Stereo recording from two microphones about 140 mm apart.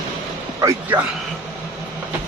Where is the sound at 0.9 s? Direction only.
10° right (ahead or behind).